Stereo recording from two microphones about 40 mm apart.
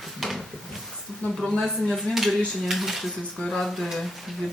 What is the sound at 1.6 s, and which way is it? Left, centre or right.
Speech, centre.